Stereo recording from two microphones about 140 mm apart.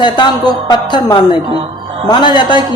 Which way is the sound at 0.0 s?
30° left (ahead or behind).